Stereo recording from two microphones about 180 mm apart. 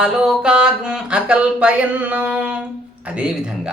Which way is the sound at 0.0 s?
5° right (ahead or behind).